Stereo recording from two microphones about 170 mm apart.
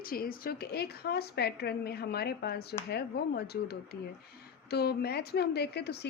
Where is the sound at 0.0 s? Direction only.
60° left (ahead or behind).